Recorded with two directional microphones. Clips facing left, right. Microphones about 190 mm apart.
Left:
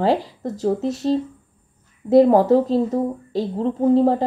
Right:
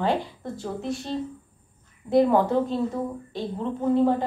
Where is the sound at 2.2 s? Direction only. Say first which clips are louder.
Left 6 dB; 40° left (ahead or behind).